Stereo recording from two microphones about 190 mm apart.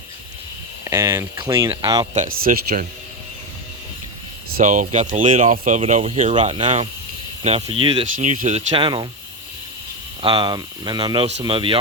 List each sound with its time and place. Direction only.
0.9 s speech: 15° right (ahead or behind)
2.1 s speech: 50° right (ahead or behind)
4.5 s speech: 40° right (ahead or behind)
6.3 s speech: 25° right (ahead or behind)
8.1 s speech: 45° right (ahead or behind); by 9.0 s 25° right (ahead or behind)
10.2 s speech: 25° right (ahead or behind)